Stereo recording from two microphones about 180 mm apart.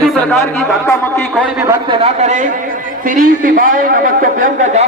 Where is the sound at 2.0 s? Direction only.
40° right (ahead or behind).